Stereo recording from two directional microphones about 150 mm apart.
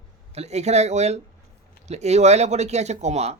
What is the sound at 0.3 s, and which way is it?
Speech, 45° right (ahead or behind).